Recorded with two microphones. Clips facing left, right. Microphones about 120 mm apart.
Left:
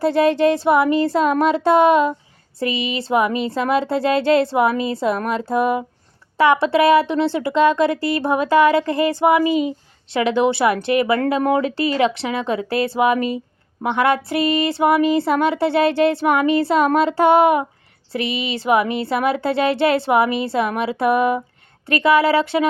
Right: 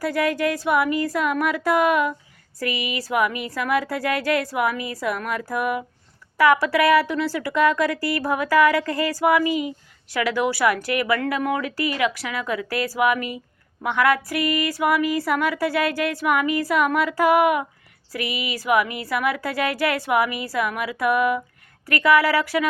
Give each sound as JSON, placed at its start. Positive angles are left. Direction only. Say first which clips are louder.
{"t": 0.0, "sound": "speech", "louder": "left 7 dB", "side_deg": 25}